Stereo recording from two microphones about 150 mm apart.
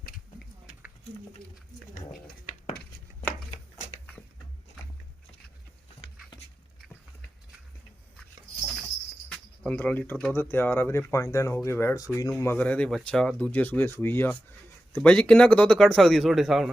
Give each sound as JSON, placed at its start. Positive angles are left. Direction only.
{"t": 2.0, "sound": "a sound", "side_deg": 60}
{"t": 3.5, "sound": "shuffling cards", "side_deg": 50}
{"t": 9.3, "sound": "speech", "side_deg": 10}